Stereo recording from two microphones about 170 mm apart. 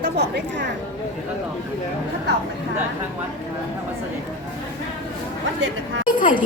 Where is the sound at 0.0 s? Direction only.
85° right.